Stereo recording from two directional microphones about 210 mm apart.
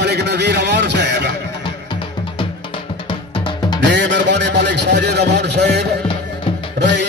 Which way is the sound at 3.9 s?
55° right (ahead or behind).